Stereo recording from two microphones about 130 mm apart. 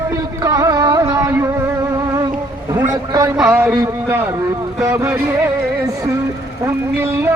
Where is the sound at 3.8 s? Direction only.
25° right (ahead or behind).